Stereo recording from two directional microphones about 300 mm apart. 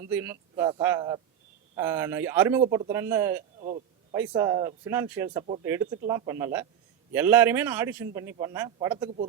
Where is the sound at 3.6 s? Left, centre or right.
Right.